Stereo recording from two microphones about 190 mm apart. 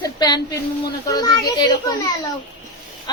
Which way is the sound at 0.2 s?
20° left (ahead or behind).